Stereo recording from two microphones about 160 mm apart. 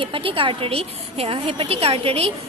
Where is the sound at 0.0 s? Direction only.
35° right (ahead or behind).